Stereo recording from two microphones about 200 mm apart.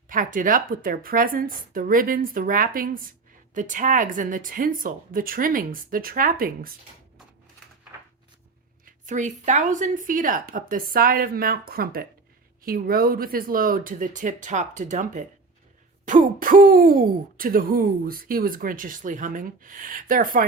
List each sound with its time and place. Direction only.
0.1 s speech: 40° right (ahead or behind)
8.8 s speech: 40° right (ahead or behind)